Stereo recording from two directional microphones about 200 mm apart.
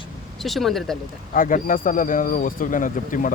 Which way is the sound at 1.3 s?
40° left (ahead or behind).